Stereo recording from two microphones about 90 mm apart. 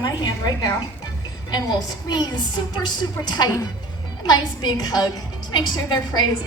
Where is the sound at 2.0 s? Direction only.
50° left (ahead or behind).